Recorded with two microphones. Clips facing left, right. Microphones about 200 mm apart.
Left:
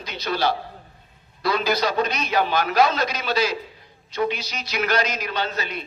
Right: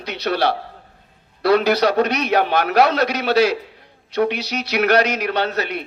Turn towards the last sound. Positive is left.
turn(degrees=-65)  # may be behind; listen again after turning